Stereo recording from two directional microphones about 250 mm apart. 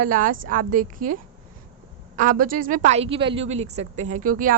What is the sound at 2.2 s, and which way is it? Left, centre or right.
A woman's voice, right.